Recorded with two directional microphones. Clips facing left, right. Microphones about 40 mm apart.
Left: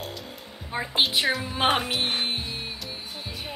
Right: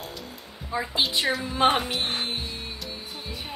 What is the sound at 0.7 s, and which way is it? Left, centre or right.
Speech, left.